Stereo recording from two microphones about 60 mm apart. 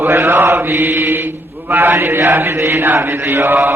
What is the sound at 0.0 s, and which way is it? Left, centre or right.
Mantra, right.